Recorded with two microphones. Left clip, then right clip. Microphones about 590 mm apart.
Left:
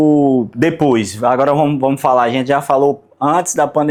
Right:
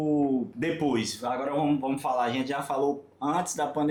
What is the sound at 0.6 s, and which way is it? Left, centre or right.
Speech, left.